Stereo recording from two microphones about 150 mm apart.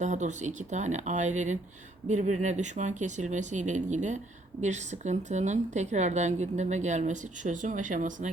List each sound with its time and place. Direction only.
0.0 s a woman's voice: 55° right (ahead or behind)